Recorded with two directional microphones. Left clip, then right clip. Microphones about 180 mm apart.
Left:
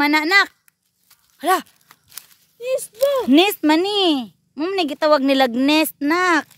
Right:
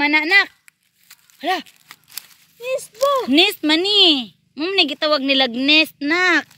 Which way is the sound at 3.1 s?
15° left (ahead or behind).